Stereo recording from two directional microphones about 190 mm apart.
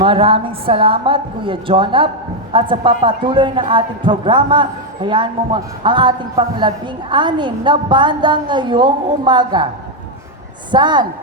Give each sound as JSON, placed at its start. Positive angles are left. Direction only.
{"t": 0.0, "sound": "a man's voice", "side_deg": -30}
{"t": 10.7, "sound": "a man's voice", "side_deg": -25}